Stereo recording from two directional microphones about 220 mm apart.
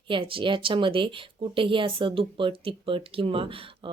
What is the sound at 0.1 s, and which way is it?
Speech, 25° right (ahead or behind).